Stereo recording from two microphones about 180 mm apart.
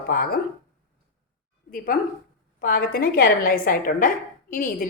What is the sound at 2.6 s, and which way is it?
A woman's voice, 55° left (ahead or behind).